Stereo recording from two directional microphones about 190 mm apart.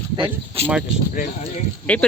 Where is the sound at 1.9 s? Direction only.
5° left (ahead or behind).